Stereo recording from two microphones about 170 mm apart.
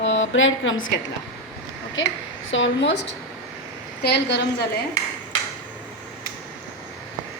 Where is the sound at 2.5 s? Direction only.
90° left.